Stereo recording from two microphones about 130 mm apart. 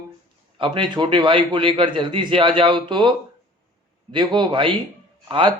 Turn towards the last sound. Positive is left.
turn(degrees=-40)  # may be behind; listen again after turning